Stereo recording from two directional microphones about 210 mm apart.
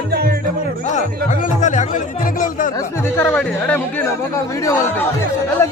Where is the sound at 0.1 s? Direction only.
50° right (ahead or behind).